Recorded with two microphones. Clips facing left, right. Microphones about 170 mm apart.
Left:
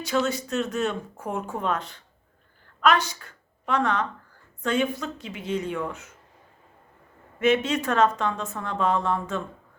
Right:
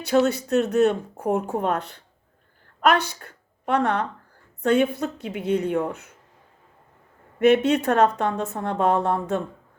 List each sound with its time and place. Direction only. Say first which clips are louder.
0.0 s a woman's voice: right 5 dB; 60° right (ahead or behind)
7.3 s speech: right 5 dB; 60° right (ahead or behind)